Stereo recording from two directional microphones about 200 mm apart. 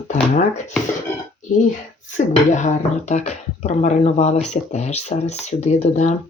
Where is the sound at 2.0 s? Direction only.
40° left (ahead or behind).